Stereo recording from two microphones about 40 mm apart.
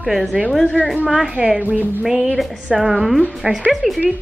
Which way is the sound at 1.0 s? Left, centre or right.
Right.